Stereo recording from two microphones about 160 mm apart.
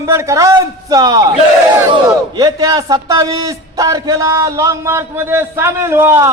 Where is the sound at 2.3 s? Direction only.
25° right (ahead or behind).